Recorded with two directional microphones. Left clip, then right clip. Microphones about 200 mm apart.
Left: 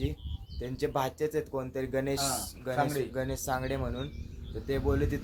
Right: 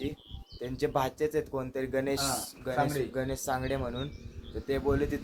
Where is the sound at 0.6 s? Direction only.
Centre (ahead or behind).